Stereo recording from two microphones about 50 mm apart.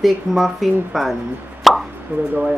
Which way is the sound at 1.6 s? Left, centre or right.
Centre.